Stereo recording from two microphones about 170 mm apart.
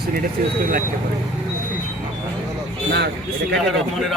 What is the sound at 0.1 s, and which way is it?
Speech, 60° right (ahead or behind).